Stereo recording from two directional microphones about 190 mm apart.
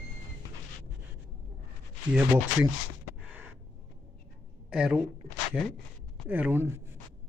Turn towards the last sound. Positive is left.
turn(degrees=-10)  # may be behind; listen again after turning